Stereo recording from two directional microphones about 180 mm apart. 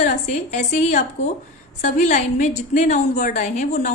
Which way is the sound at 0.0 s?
45° left (ahead or behind).